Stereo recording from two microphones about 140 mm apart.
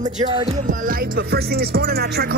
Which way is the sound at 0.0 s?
60° right (ahead or behind).